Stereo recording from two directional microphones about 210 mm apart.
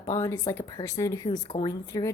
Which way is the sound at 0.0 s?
15° left (ahead or behind).